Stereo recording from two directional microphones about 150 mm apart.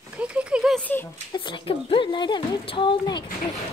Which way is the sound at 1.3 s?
30° left (ahead or behind).